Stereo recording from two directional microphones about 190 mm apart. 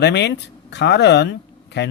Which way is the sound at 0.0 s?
65° left (ahead or behind).